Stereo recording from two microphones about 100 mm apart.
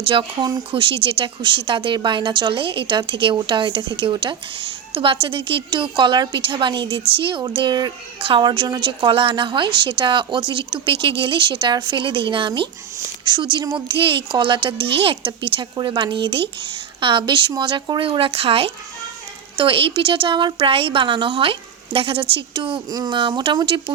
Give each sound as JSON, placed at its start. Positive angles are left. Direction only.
{"t": 0.0, "sound": "a woman's voice", "side_deg": -60}
{"t": 8.2, "sound": "a woman's voice", "side_deg": -55}
{"t": 18.0, "sound": "a woman's voice", "side_deg": -65}
{"t": 22.9, "sound": "speech", "side_deg": -40}